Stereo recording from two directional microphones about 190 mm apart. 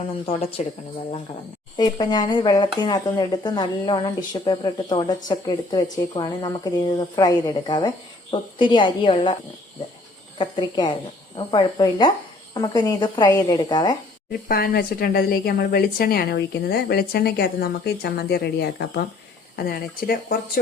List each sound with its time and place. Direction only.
0.3 s speech: 30° left (ahead or behind)
1.7 s speech: 20° left (ahead or behind)
10.3 s speech: 25° left (ahead or behind)
14.4 s speech: 50° left (ahead or behind)